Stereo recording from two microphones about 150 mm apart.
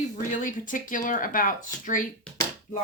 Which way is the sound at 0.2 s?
60° left (ahead or behind).